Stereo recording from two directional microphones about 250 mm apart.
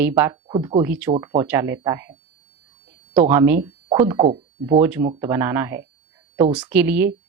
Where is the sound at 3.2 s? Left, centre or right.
Centre.